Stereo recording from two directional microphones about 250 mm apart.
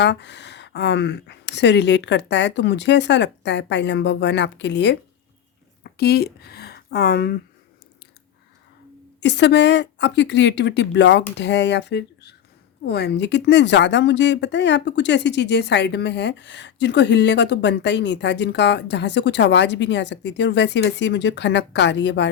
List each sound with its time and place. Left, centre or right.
0.0 s a woman's voice: left
9.2 s a woman's voice: left